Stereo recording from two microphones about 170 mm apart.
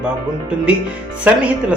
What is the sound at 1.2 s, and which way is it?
Speech, 10° right (ahead or behind).